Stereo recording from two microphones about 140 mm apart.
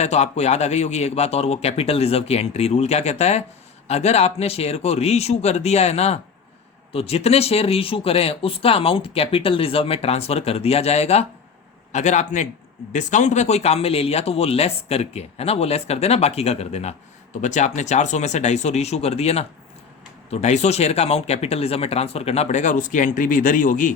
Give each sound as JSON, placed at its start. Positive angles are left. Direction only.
{"t": 0.0, "sound": "speech", "side_deg": 50}